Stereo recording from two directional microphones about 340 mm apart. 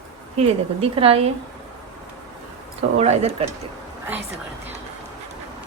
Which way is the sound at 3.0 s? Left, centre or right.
Centre.